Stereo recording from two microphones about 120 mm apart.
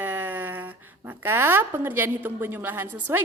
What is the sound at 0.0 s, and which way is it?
A woman's voice, 15° right (ahead or behind).